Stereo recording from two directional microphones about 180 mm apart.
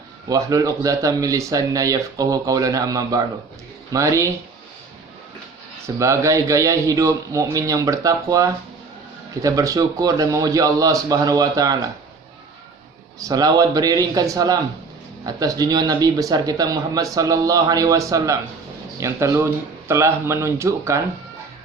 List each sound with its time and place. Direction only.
0.3 s speech: 20° right (ahead or behind)
5.8 s speech: 15° right (ahead or behind)
13.1 s speech: 20° right (ahead or behind)